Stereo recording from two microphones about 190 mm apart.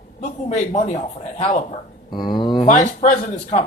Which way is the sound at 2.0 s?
25° left (ahead or behind).